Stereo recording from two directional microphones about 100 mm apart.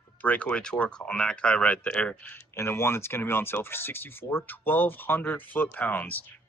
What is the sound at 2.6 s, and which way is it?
Speech, 25° left (ahead or behind).